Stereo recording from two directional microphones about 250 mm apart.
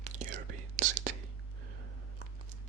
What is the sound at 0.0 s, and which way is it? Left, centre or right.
Whispering, right.